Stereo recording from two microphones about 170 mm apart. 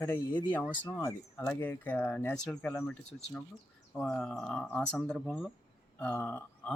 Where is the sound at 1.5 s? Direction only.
10° left (ahead or behind).